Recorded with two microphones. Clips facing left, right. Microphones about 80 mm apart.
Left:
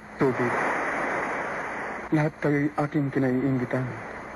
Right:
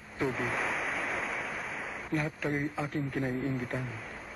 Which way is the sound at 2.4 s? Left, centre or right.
Left.